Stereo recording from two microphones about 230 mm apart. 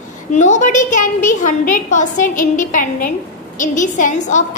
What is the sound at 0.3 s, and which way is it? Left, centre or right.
A woman's voice, left.